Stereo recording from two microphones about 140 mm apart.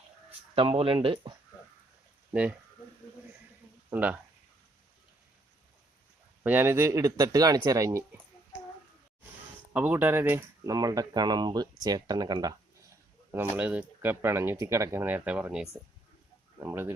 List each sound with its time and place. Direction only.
0.5 s speech: 40° right (ahead or behind)
2.3 s speech: 10° right (ahead or behind)
3.9 s speech: 10° right (ahead or behind)
6.4 s speech: 15° right (ahead or behind)
9.7 s speech: 15° right (ahead or behind)
13.3 s speech: 15° right (ahead or behind)